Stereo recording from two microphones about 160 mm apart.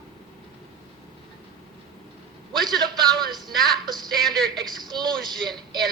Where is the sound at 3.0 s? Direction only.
Centre (ahead or behind).